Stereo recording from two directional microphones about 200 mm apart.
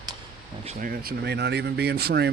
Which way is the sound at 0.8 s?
45° right (ahead or behind).